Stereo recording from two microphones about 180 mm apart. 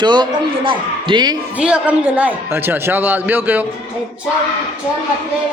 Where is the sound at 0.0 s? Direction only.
25° right (ahead or behind).